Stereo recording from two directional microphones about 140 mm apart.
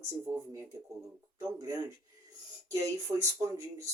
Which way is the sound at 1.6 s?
25° right (ahead or behind).